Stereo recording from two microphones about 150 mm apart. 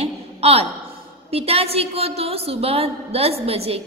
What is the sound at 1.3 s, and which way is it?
A woman's voice, 40° right (ahead or behind).